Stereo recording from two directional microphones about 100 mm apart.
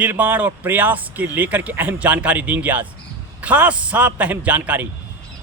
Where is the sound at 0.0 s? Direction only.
15° right (ahead or behind).